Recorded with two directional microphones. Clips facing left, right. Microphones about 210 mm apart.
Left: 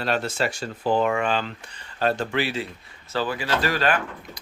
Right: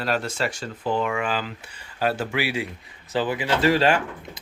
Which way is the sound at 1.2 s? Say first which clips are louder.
Left 2 dB; 5° right (ahead or behind).